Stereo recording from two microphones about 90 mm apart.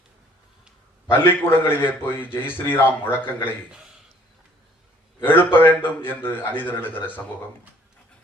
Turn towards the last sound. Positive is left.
turn(degrees=20)  # may be behind; listen again after turning